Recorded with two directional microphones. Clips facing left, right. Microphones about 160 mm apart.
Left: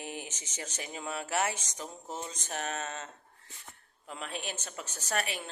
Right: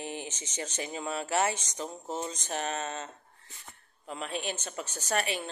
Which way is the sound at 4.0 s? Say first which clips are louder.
Right 4 dB; 30° right (ahead or behind).